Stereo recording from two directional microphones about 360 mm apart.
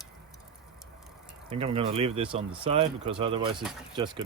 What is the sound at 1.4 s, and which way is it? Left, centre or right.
Speech, centre.